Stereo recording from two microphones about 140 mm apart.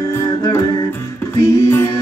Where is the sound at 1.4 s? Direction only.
20° left (ahead or behind).